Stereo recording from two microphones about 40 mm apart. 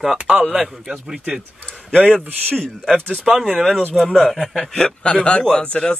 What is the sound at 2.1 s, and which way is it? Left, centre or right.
Speech, centre.